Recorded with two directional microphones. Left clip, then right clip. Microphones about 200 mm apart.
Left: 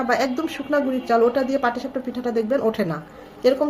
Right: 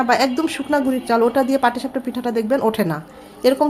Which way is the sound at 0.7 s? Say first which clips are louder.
Even; 50° right (ahead or behind).